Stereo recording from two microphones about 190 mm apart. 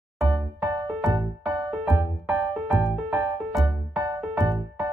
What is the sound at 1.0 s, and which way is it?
Music, 25° right (ahead or behind).